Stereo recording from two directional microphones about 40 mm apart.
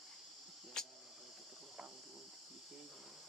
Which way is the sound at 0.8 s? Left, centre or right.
Centre.